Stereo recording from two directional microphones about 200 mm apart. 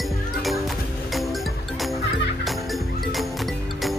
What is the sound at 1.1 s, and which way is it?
Music, centre (ahead or behind).